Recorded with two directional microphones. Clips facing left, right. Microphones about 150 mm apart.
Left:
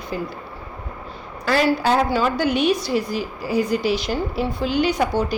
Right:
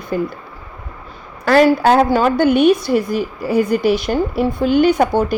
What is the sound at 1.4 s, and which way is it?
A woman's voice, 55° right (ahead or behind).